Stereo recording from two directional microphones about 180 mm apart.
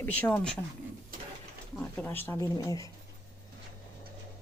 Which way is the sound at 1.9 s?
10° left (ahead or behind).